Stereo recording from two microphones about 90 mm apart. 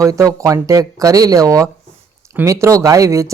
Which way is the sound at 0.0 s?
40° right (ahead or behind).